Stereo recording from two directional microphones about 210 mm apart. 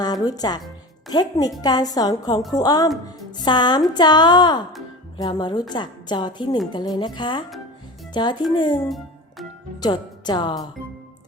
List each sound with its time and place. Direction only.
0.0 s a woman's voice: 20° left (ahead or behind)
9.8 s a woman's voice: 20° left (ahead or behind)